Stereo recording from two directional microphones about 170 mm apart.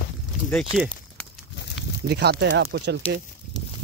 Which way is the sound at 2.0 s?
75° right (ahead or behind).